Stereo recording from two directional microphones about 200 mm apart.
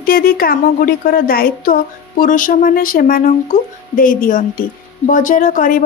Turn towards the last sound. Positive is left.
turn(degrees=40)  # may be behind; listen again after turning